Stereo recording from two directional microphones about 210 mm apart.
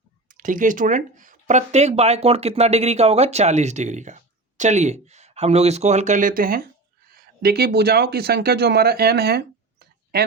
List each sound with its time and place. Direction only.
0.3 s speech: 40° right (ahead or behind)